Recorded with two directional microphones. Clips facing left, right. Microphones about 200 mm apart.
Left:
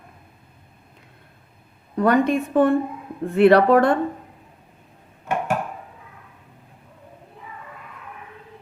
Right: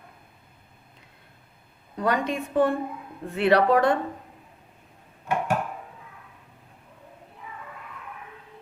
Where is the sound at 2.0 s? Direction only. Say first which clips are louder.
Left 7 dB; 55° left (ahead or behind).